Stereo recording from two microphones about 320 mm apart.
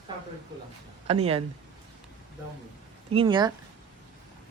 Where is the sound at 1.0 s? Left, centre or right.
Centre.